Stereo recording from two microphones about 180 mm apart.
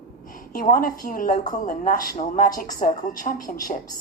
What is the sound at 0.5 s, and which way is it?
A woman's voice, 50° left (ahead or behind).